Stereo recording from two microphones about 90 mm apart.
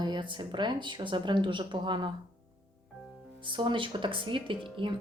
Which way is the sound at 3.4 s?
65° right (ahead or behind).